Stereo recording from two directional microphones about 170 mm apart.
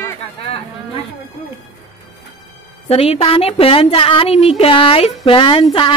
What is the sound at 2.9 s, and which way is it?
Speech, 35° left (ahead or behind).